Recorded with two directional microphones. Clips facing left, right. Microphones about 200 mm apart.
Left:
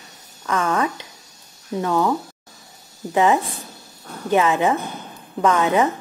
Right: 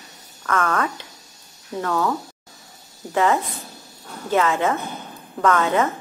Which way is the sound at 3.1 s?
15° left (ahead or behind).